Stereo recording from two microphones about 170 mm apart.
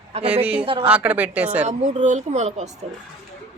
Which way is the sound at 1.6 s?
40° right (ahead or behind).